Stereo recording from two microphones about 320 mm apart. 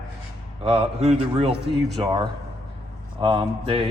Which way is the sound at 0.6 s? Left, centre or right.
Centre.